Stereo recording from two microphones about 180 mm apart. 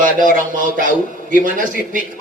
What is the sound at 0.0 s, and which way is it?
A man's voice, 45° right (ahead or behind).